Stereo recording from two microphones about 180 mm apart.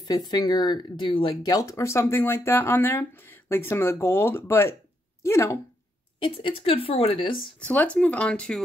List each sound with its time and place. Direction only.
0.0 s speech: 20° left (ahead or behind)
6.1 s a woman's voice: 30° left (ahead or behind)
7.6 s speech: 10° left (ahead or behind)